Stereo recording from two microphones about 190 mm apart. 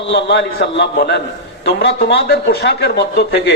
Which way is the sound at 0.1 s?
65° left (ahead or behind).